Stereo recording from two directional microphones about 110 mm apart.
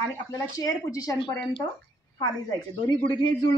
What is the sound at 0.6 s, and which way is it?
Speech, 30° left (ahead or behind).